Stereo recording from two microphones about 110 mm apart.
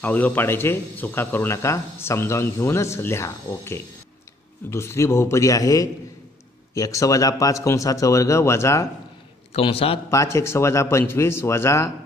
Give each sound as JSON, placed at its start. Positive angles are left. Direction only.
{"t": 0.0, "sound": "speech", "side_deg": 15}
{"t": 9.5, "sound": "a man's voice", "side_deg": 60}
{"t": 10.1, "sound": "speech", "side_deg": 25}